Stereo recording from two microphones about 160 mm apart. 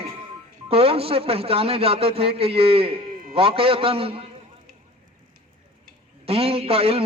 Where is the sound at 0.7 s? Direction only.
35° right (ahead or behind).